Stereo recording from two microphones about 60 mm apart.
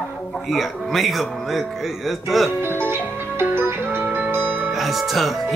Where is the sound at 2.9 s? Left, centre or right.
Right.